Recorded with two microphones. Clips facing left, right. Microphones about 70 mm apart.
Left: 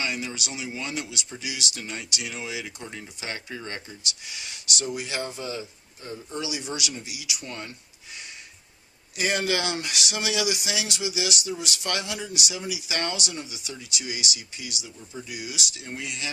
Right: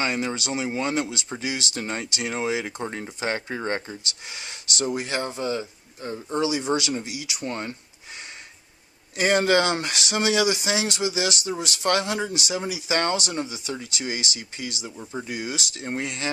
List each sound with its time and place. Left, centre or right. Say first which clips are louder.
0.0 s speech: right 5 dB; right
9.1 s speech: right 6 dB; right